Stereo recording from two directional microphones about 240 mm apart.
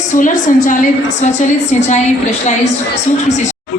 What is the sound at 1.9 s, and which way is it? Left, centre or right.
Speech, left.